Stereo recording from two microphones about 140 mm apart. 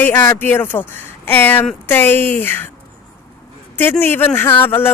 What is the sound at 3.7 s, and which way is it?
Speech, 15° left (ahead or behind).